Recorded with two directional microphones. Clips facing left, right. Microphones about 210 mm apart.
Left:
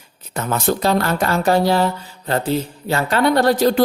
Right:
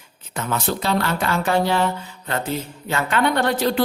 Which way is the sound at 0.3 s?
40° left (ahead or behind).